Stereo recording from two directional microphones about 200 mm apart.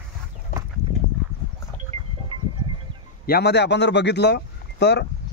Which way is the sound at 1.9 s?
35° right (ahead or behind).